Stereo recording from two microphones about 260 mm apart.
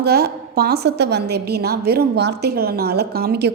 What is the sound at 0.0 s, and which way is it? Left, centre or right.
A woman's voice, right.